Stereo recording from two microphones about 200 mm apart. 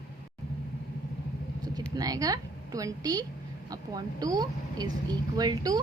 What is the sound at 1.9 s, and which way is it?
A woman's voice, 20° right (ahead or behind).